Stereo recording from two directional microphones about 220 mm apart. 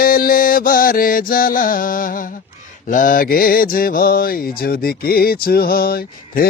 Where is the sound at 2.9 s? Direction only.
40° left (ahead or behind).